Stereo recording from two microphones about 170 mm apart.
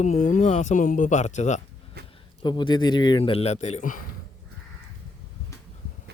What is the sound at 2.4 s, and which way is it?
Speech, 25° left (ahead or behind).